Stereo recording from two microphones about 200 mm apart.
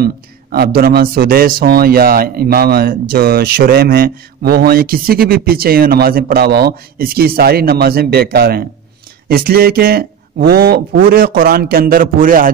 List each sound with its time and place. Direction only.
0.0 s speech: 50° right (ahead or behind)